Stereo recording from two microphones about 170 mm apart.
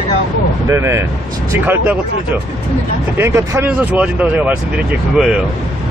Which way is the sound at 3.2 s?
15° right (ahead or behind).